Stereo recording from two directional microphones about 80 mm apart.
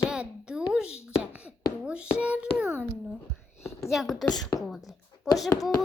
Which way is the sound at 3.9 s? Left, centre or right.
Centre.